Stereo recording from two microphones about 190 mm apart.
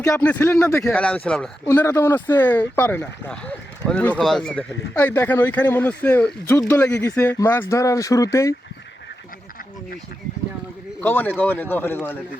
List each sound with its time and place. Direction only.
0.0 s speech: 10° left (ahead or behind)
11.0 s speech: 10° left (ahead or behind)